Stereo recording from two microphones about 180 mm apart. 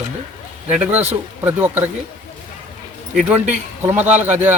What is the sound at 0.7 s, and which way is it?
Speech, 5° right (ahead or behind).